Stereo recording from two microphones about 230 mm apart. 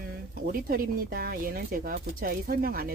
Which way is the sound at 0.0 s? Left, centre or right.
Right.